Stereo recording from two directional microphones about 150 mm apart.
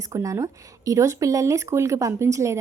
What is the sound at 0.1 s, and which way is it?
Speech, 20° right (ahead or behind).